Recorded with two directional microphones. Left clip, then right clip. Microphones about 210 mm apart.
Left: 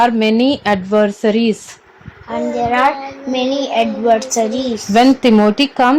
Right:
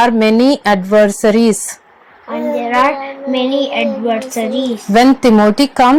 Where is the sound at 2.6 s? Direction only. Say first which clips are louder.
Right 1 dB; 10° left (ahead or behind).